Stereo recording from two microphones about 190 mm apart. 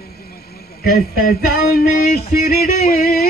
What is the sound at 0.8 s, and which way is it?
A man's voice, 50° left (ahead or behind).